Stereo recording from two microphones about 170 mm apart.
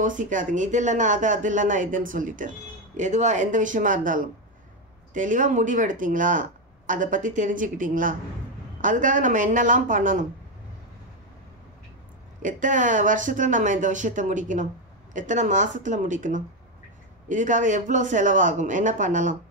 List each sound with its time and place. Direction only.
0.0 s speech: 50° right (ahead or behind)
12.4 s speech: 50° right (ahead or behind)